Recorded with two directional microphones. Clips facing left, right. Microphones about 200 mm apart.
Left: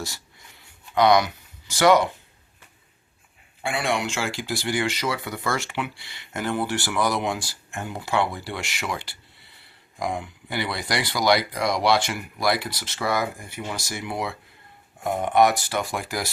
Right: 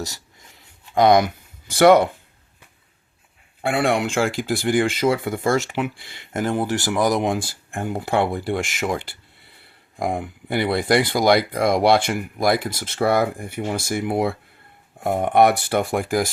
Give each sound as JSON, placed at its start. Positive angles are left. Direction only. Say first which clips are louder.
{"t": 0.9, "sound": "speech", "louder": "right 3 dB", "side_deg": -50}
{"t": 3.6, "sound": "speech", "louder": "right 6 dB", "side_deg": -55}